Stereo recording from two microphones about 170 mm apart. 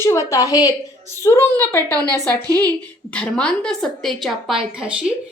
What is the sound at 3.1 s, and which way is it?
A woman's voice, 5° left (ahead or behind).